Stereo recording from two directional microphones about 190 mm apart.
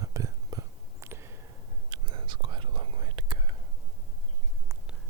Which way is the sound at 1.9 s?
25° right (ahead or behind).